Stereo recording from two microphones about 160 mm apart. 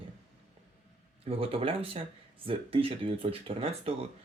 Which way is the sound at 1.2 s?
35° right (ahead or behind).